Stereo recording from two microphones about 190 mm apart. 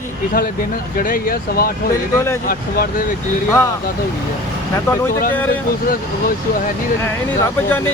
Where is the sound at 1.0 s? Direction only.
50° left (ahead or behind).